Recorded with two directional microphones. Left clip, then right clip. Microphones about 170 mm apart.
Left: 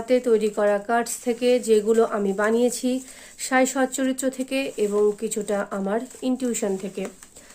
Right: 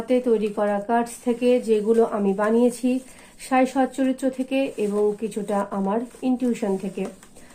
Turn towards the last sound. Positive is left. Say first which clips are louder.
# even
turn(degrees=35)  # may be behind; listen again after turning